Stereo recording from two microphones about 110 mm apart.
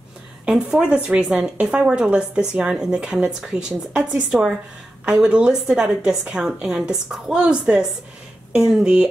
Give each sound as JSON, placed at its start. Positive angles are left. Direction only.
{"t": 0.5, "sound": "a woman's voice", "side_deg": -5}